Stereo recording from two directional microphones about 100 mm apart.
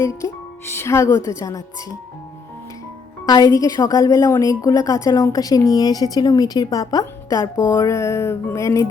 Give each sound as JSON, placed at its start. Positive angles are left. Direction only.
{"t": 0.0, "sound": "speech", "side_deg": 30}
{"t": 3.2, "sound": "a woman's voice", "side_deg": 40}
{"t": 7.7, "sound": "a sound", "side_deg": 30}